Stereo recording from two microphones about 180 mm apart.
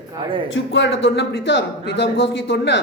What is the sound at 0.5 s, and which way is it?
A woman's voice, 90° left.